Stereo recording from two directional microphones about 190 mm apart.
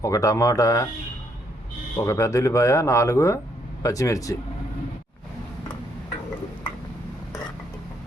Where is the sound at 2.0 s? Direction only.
15° left (ahead or behind).